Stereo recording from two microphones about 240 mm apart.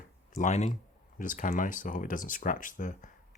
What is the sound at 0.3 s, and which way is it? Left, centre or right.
Speech, left.